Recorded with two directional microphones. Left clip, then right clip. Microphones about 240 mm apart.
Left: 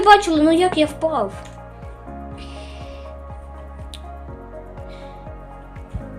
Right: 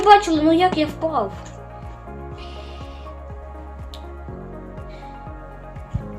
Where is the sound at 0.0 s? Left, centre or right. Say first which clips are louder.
Left 1 dB; left.